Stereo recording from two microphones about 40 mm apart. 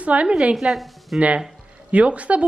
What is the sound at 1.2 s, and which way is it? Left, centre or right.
A woman's voice, right.